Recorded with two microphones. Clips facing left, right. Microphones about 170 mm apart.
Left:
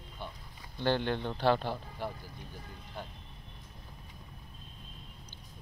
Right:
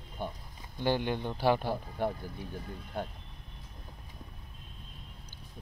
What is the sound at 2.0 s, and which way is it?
Speech, 50° right (ahead or behind).